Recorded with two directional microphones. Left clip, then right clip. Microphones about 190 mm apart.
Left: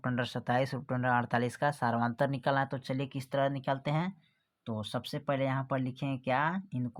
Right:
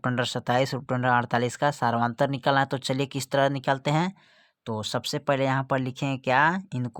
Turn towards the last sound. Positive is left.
turn(degrees=-50)  # may be behind; listen again after turning